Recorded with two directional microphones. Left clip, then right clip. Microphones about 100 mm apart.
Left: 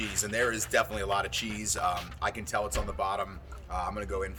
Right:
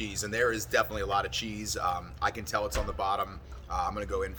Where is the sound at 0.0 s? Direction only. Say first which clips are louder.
Even; 15° right (ahead or behind).